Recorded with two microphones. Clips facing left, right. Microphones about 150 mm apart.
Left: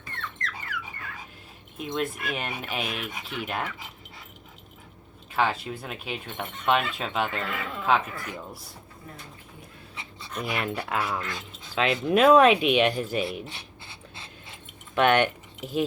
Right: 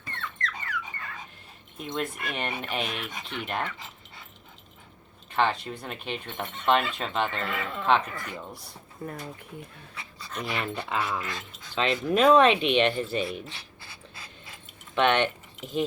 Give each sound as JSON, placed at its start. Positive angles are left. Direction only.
{"t": 0.4, "sound": "a sound", "side_deg": 5}
{"t": 1.8, "sound": "speech", "side_deg": 0}
{"t": 5.3, "sound": "speech", "side_deg": 5}
{"t": 9.0, "sound": "speech", "side_deg": -55}
{"t": 9.9, "sound": "pant", "side_deg": 20}
{"t": 10.3, "sound": "speech", "side_deg": 5}
{"t": 13.4, "sound": "a sound", "side_deg": 25}
{"t": 14.9, "sound": "speech", "side_deg": 10}